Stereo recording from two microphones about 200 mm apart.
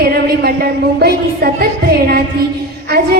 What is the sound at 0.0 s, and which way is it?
A woman's voice, 50° right (ahead or behind).